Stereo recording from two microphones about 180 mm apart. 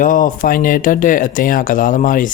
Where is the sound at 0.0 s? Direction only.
50° left (ahead or behind).